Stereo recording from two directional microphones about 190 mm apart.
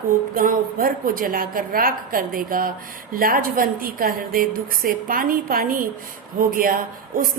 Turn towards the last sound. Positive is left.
turn(degrees=-45)  # may be behind; listen again after turning